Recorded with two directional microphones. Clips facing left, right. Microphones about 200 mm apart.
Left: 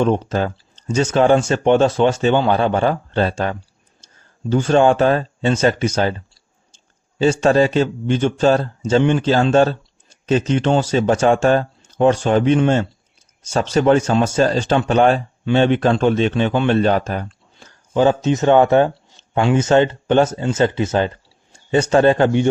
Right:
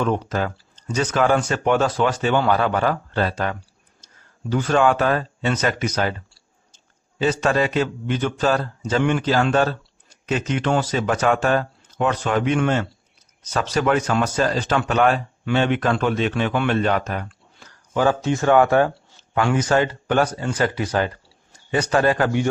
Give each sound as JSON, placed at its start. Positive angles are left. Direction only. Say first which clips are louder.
{"t": 0.0, "sound": "speech", "louder": "left 5 dB", "side_deg": 25}